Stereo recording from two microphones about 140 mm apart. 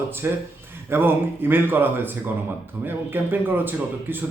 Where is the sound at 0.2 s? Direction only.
15° right (ahead or behind).